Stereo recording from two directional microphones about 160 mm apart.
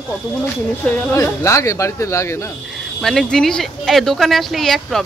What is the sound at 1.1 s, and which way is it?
Speech, 20° left (ahead or behind).